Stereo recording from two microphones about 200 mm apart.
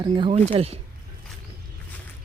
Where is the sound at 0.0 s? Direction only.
25° right (ahead or behind).